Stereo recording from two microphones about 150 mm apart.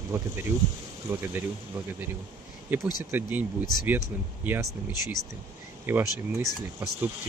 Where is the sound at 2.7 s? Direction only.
10° right (ahead or behind).